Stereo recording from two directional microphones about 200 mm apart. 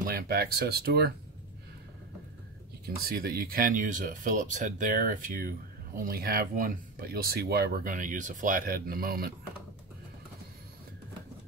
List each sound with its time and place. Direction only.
0.0 s speech: 50° right (ahead or behind)
3.0 s speech: 50° right (ahead or behind)